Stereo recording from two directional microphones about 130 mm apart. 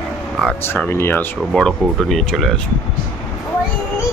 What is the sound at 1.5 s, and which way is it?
Speech, 5° left (ahead or behind).